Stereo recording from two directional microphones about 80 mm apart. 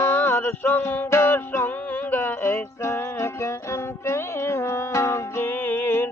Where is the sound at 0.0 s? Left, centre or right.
Left.